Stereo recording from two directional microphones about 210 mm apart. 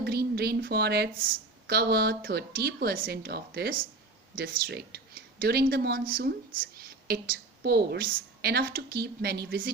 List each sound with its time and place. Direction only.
0.0 s speech: 50° right (ahead or behind)